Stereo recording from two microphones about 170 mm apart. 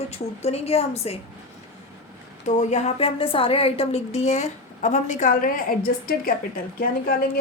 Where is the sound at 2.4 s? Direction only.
40° left (ahead or behind).